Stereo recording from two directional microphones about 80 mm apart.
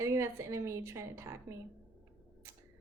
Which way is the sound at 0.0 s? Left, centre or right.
Right.